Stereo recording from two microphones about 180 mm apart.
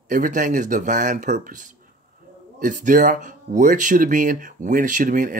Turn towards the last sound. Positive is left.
turn(degrees=-45)  # may be behind; listen again after turning